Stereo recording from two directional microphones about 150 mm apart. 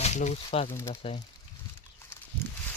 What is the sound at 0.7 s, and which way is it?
Speech, 20° left (ahead or behind).